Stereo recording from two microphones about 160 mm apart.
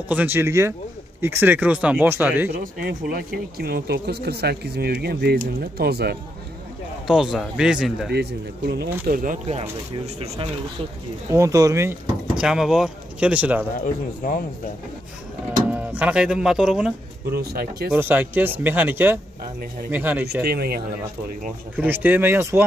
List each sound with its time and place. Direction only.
0.1 s speech: 10° right (ahead or behind)
2.6 s speech: 60° right (ahead or behind); by 6.1 s 80° right
7.1 s speech: 5° right (ahead or behind)
8.1 s speech: 90° right; by 9.6 s 55° right (ahead or behind)
10.2 s speech: 40° right (ahead or behind)
11.2 s speech: 20° right (ahead or behind)
12.4 s speech: 5° right (ahead or behind)
13.7 s speech: 55° left (ahead or behind)
15.7 s speech: 10° right (ahead or behind)
17.3 s speech: 85° right
17.9 s speech: 10° right (ahead or behind)
20.4 s speech: 75° right (ahead or behind)
21.7 s speech: 10° right (ahead or behind)